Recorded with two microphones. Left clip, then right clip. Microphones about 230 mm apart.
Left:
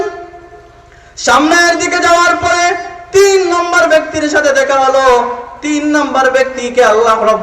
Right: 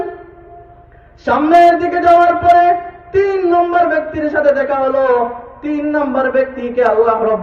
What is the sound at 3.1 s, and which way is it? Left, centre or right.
A man's voice, centre.